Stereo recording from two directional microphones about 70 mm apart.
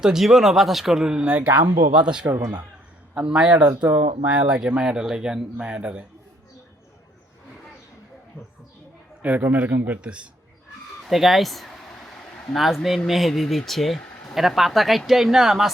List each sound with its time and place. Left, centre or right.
0.0 s speech: centre
9.2 s a man's voice: right
11.1 s a sound: centre
12.5 s speech: centre